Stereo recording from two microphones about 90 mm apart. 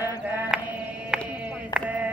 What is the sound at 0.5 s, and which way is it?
Sheep, 10° right (ahead or behind).